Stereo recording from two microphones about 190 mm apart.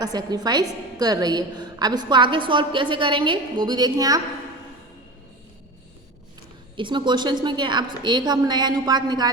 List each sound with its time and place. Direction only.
0.0 s a woman's voice: 20° right (ahead or behind)
6.7 s a woman's voice: 25° right (ahead or behind)